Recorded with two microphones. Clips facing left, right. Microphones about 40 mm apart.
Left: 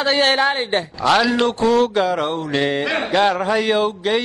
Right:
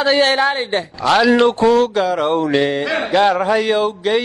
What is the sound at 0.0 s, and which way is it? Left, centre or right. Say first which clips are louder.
Speech: right 2 dB; centre.